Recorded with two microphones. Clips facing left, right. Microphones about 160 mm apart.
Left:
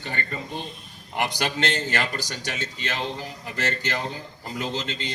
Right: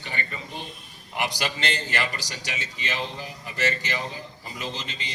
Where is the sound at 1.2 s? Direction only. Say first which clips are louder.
Left 3 dB; 55° left (ahead or behind).